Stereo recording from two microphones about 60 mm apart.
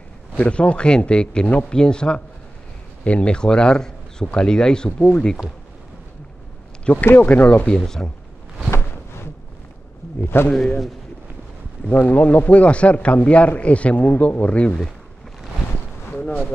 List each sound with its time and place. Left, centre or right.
0.4 s speech: centre
7.2 s a man's voice: left
7.6 s speech: centre
8.6 s a sound: left
10.2 s a man's voice: left
10.5 s speech: centre
11.9 s a man's voice: left